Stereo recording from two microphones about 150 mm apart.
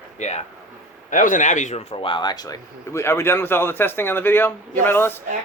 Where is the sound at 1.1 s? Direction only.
60° left (ahead or behind); by 5.2 s 15° left (ahead or behind).